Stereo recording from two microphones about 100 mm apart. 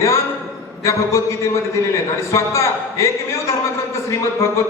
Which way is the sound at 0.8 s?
30° left (ahead or behind).